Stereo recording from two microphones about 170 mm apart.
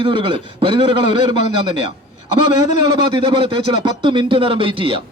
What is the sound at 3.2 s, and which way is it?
A man's voice, 30° right (ahead or behind).